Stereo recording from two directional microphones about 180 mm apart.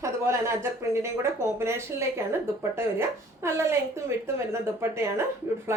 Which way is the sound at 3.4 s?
15° right (ahead or behind).